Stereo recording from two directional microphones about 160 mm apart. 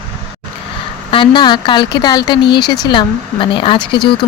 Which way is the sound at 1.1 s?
30° left (ahead or behind).